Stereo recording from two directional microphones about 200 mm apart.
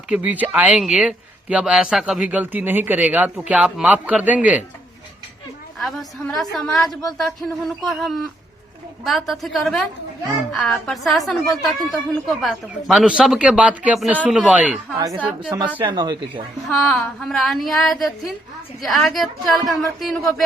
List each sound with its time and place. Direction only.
0.1 s speech: 10° right (ahead or behind)
5.8 s speech: centre (ahead or behind)
15.8 s speech: 20° right (ahead or behind)
16.3 s speech: centre (ahead or behind)